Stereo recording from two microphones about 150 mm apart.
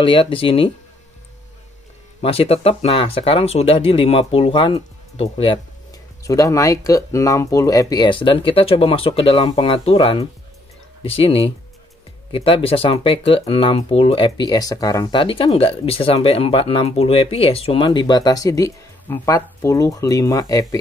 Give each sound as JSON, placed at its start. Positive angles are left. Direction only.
{"t": 0.0, "sound": "speech", "side_deg": 35}
{"t": 2.2, "sound": "speech", "side_deg": 40}
{"t": 6.2, "sound": "speech", "side_deg": 20}